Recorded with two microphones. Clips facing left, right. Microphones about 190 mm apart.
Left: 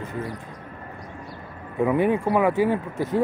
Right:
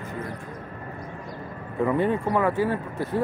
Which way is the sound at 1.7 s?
10° left (ahead or behind).